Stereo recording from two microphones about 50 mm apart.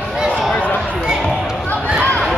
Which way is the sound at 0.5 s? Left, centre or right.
Left.